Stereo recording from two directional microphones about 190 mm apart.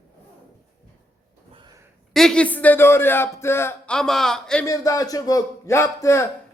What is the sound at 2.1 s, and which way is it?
A man's voice, 5° left (ahead or behind).